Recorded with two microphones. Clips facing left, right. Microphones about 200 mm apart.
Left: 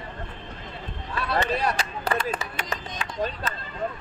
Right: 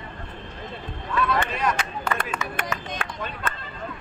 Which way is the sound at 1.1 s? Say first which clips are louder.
Right 1 dB; 35° left (ahead or behind).